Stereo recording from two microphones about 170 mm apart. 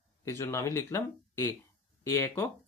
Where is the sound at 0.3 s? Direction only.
15° left (ahead or behind).